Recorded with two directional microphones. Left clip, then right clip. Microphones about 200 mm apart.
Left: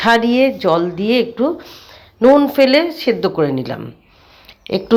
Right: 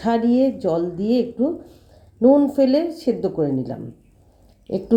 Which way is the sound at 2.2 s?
20° left (ahead or behind).